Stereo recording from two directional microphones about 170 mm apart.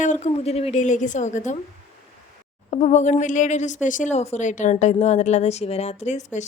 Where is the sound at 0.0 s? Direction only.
45° left (ahead or behind).